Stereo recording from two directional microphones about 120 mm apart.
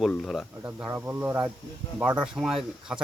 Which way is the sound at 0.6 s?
20° right (ahead or behind).